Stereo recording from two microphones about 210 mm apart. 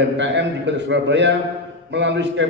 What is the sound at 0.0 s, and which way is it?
A man's voice, 55° right (ahead or behind).